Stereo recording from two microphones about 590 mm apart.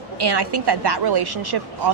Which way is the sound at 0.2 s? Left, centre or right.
Right.